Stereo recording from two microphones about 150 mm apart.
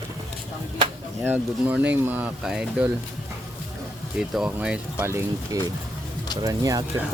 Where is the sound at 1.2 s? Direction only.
10° right (ahead or behind).